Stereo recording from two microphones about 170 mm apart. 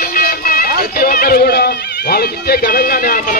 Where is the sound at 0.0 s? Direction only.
60° left (ahead or behind).